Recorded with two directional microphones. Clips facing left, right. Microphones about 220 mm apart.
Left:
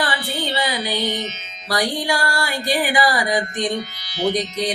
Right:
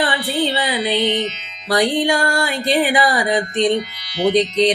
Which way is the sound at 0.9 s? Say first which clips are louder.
Right 5 dB; 25° right (ahead or behind).